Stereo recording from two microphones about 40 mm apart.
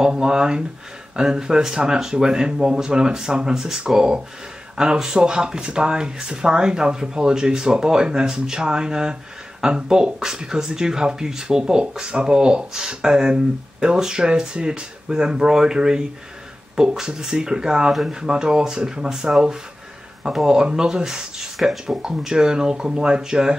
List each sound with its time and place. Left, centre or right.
0.0 s speech: centre